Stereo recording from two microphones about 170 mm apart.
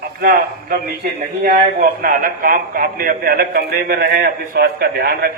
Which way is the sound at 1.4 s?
60° right (ahead or behind).